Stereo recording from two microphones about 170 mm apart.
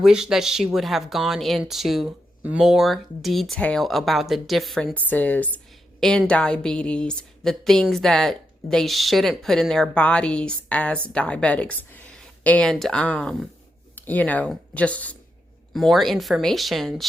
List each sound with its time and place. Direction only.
0.0 s speech: 5° right (ahead or behind)